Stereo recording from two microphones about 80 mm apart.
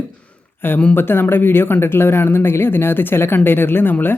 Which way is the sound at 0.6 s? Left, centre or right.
Left.